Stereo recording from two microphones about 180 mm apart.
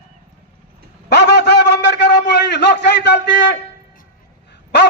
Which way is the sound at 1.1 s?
70° left (ahead or behind).